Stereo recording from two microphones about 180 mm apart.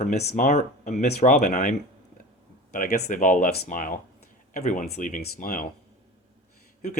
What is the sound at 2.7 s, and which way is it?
Speech, 45° left (ahead or behind).